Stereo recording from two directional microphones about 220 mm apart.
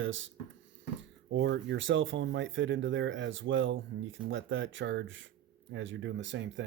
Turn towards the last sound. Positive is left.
turn(degrees=-55)  # may be behind; listen again after turning